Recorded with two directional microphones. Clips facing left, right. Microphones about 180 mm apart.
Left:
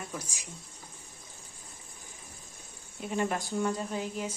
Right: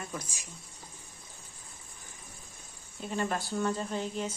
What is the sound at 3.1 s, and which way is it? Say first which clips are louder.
Speech: left 1 dB; 15° left (ahead or behind).